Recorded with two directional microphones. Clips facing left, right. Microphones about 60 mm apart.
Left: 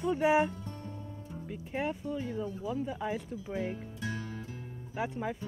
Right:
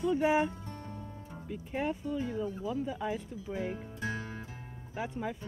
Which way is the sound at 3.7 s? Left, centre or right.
Right.